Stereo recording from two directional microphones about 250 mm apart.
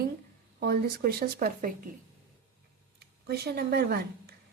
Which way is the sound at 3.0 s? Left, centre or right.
Right.